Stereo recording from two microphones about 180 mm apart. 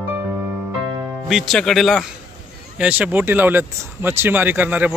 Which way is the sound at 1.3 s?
Centre (ahead or behind).